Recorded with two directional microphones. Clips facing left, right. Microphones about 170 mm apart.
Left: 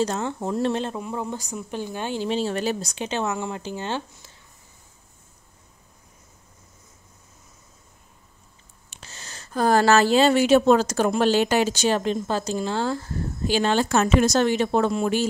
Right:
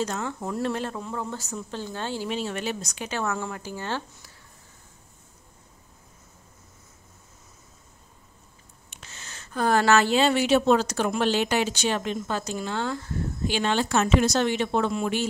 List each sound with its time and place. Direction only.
0.0 s speech: 30° left (ahead or behind)
2.2 s speech: 30° left (ahead or behind)
8.9 s speech: 35° left (ahead or behind)